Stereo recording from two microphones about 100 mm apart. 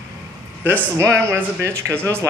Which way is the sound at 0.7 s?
25° right (ahead or behind).